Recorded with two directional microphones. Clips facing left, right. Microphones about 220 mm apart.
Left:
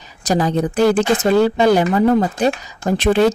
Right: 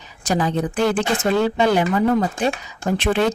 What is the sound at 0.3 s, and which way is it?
Speech, 40° left (ahead or behind).